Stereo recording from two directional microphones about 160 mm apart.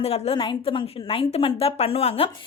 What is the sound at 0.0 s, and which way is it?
A woman's voice, 40° left (ahead or behind).